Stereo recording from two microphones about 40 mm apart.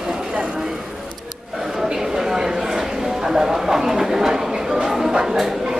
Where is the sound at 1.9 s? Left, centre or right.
Centre.